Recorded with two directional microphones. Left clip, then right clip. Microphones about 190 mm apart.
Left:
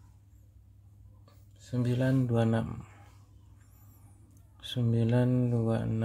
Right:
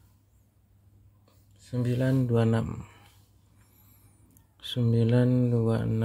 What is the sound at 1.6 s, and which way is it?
Speech, 10° right (ahead or behind).